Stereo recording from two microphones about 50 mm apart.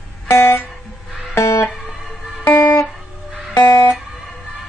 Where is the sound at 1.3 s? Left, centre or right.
Left.